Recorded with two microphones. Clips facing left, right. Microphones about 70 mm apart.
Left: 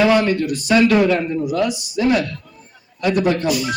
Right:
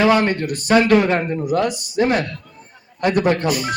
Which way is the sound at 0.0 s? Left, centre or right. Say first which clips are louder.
Left 1 dB; right.